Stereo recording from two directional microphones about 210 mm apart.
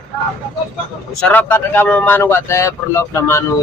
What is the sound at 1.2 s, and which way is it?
Speech, 10° left (ahead or behind).